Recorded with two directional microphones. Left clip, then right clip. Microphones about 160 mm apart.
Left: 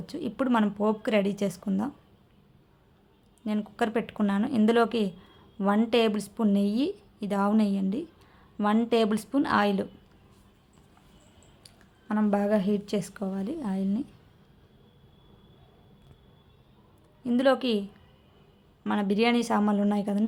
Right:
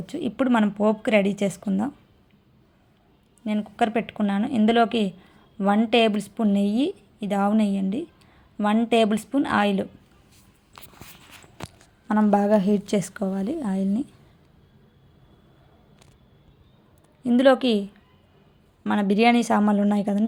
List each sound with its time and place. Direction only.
0.0 s a woman's voice: 20° right (ahead or behind)
3.4 s a woman's voice: 15° right (ahead or behind)
12.0 s a woman's voice: 25° right (ahead or behind)
17.2 s a woman's voice: 25° right (ahead or behind)